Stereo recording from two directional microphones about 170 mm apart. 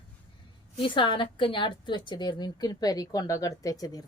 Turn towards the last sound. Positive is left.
turn(degrees=20)  # may be behind; listen again after turning